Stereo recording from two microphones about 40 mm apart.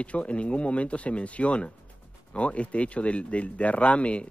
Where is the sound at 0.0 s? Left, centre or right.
Left.